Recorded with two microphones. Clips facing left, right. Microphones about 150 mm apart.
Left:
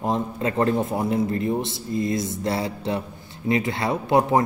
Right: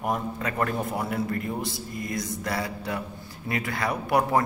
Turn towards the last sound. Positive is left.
turn(degrees=20)  # may be behind; listen again after turning